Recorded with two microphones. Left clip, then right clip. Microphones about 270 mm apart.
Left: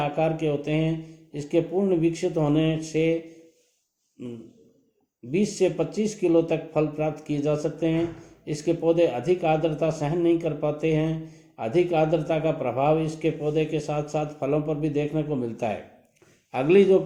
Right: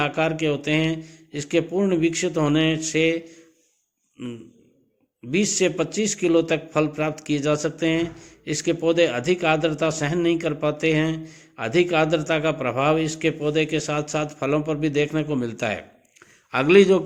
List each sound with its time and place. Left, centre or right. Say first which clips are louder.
0.0 s speech: right 2 dB; right
5.3 s speech: right 2 dB; right